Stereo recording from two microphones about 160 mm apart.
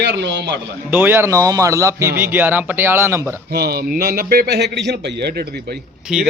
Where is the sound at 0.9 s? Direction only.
10° right (ahead or behind).